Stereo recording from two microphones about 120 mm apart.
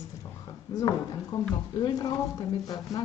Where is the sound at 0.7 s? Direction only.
30° left (ahead or behind).